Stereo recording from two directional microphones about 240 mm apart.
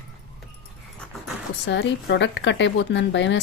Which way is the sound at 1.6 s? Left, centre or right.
Left.